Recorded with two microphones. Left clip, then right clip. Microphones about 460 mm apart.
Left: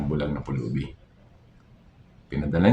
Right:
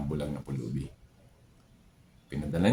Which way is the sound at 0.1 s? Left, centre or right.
Right.